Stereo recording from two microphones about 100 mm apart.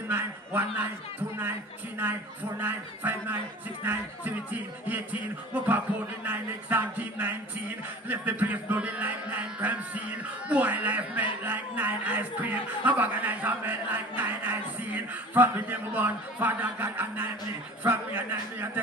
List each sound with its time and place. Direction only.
0.1 s a man's voice: 20° right (ahead or behind)
2.6 s a man's voice: 20° right (ahead or behind)